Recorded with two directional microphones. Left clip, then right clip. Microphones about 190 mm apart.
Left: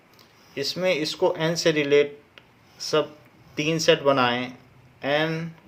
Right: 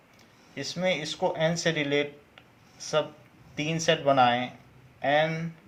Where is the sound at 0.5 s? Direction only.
50° left (ahead or behind).